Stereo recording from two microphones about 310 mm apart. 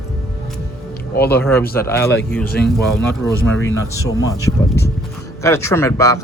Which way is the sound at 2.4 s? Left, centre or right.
Left.